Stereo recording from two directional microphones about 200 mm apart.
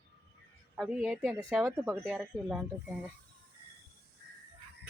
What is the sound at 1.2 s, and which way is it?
Speech, 15° right (ahead or behind).